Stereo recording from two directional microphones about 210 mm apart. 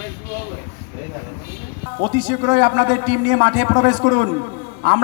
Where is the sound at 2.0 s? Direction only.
20° right (ahead or behind).